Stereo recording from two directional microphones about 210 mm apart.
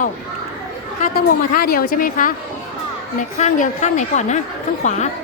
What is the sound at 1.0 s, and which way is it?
A woman's voice, 45° left (ahead or behind).